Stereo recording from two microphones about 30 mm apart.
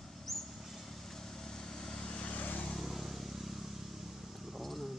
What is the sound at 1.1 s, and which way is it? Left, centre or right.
Vehicle, centre.